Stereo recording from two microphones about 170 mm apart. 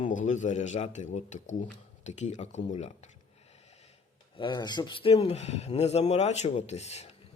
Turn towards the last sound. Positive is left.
turn(degrees=40)  # may be behind; listen again after turning